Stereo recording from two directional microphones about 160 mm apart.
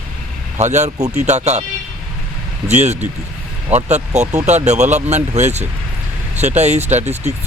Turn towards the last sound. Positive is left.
turn(degrees=-45)  # may be behind; listen again after turning